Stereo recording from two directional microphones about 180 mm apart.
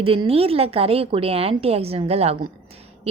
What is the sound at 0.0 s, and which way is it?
A woman's voice, 30° right (ahead or behind).